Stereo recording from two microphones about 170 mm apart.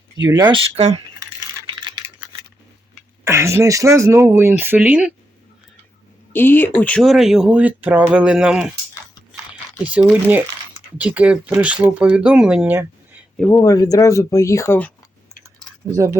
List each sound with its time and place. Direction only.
0.5 s speech: 40° right (ahead or behind)
3.2 s speech: 15° right (ahead or behind)
6.3 s speech: 10° left (ahead or behind); by 8.7 s 5° right (ahead or behind)
9.8 s speech: 10° right (ahead or behind)
13.4 s speech: 15° left (ahead or behind)
15.9 s speech: 20° right (ahead or behind)